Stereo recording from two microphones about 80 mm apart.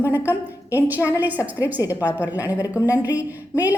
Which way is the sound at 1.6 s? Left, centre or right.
Left.